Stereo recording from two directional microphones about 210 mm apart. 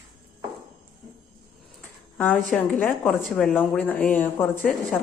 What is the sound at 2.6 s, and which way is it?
A woman's voice, 5° left (ahead or behind).